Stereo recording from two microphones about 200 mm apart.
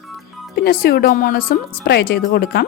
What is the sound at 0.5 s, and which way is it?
A woman's voice, 50° left (ahead or behind).